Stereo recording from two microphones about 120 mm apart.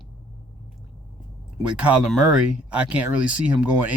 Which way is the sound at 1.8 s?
10° right (ahead or behind).